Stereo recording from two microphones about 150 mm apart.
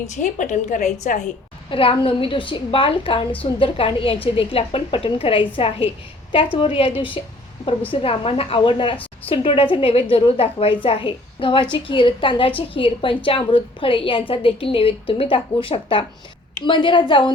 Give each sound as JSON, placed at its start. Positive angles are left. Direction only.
{"t": 0.1, "sound": "a woman's voice", "side_deg": 55}
{"t": 1.7, "sound": "a woman's voice", "side_deg": 35}